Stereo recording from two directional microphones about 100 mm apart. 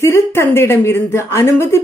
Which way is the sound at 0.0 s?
25° left (ahead or behind).